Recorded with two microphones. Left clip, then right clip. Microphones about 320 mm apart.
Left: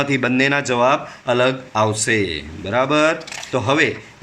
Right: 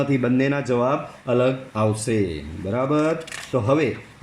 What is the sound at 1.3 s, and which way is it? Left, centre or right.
A man's voice, left.